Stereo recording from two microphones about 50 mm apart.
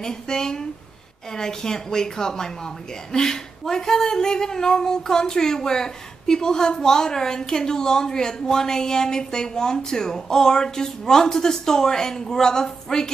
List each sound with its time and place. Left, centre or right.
0.0 s speech: centre